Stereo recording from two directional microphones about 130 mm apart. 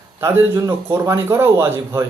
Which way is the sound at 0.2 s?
20° right (ahead or behind).